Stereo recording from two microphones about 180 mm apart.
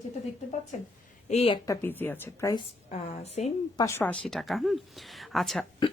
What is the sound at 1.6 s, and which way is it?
Speech, 10° left (ahead or behind).